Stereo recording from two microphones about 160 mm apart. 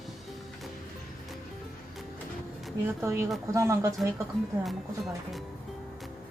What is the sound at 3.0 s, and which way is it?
Speech, 15° right (ahead or behind).